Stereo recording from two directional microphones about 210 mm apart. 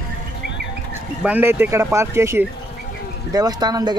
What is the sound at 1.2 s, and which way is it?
Speech, 10° right (ahead or behind).